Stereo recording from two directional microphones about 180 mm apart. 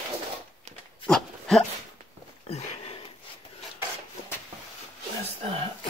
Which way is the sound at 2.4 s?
35° left (ahead or behind).